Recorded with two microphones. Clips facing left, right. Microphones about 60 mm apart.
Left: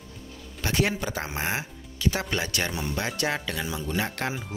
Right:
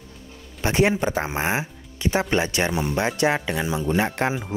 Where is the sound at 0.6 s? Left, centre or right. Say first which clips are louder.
Right 6 dB; right.